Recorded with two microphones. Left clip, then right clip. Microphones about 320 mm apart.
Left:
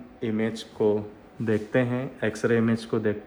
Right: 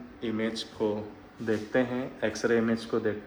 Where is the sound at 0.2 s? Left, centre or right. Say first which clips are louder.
Left 3 dB; centre.